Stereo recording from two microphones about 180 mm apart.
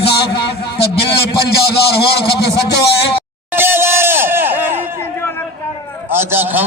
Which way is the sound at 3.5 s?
10° right (ahead or behind).